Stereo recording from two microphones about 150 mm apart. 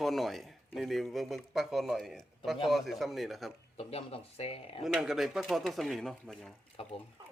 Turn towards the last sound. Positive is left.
turn(degrees=40)  # may be behind; listen again after turning